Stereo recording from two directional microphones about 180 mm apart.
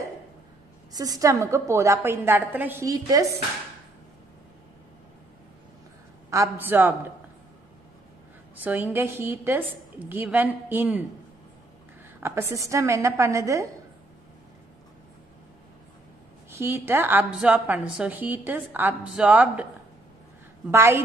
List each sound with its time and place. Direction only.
0.9 s a woman's voice: 20° right (ahead or behind)
6.3 s a woman's voice: 15° right (ahead or behind)
8.5 s a woman's voice: 10° right (ahead or behind)
12.2 s a woman's voice: 15° right (ahead or behind)
16.4 s a woman's voice: 15° right (ahead or behind)
20.7 s a woman's voice: 15° right (ahead or behind)